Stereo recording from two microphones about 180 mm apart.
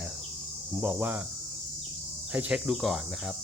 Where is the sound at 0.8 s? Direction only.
10° right (ahead or behind).